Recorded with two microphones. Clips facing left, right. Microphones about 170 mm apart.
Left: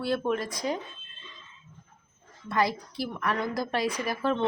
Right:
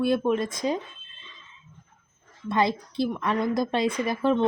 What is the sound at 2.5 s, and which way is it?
A woman's voice, 25° right (ahead or behind).